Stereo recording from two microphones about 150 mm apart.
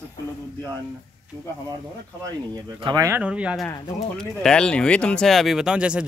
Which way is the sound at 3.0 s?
10° right (ahead or behind).